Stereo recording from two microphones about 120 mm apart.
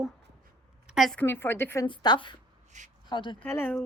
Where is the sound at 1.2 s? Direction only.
20° left (ahead or behind).